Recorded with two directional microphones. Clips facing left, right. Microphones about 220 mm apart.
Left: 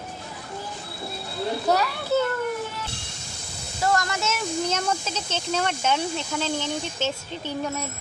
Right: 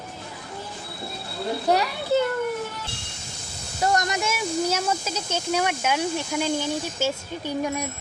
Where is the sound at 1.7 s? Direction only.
15° right (ahead or behind).